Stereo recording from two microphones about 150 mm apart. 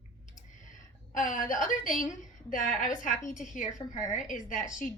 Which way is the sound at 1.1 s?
65° left (ahead or behind).